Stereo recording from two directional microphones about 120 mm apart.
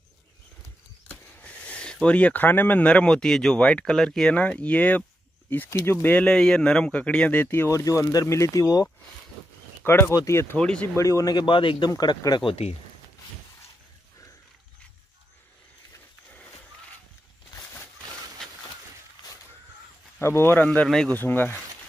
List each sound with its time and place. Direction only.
1.2 s speech: 10° left (ahead or behind); by 8.8 s 30° left (ahead or behind)
9.8 s speech: 20° left (ahead or behind)
10.6 s speech: 5° left (ahead or behind)
11.0 s speech: 25° left (ahead or behind); by 11.9 s 45° left (ahead or behind)
11.9 s speech: 30° left (ahead or behind)
20.2 s speech: 20° left (ahead or behind)